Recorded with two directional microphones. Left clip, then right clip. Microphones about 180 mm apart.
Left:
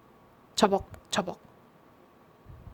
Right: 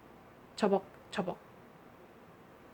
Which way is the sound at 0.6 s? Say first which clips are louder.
Left 6 dB; 40° left (ahead or behind).